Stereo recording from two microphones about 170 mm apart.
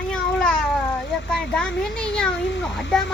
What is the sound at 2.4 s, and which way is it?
Speech, 90° left.